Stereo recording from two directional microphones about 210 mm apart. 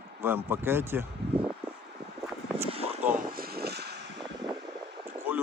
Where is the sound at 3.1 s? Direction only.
45° right (ahead or behind).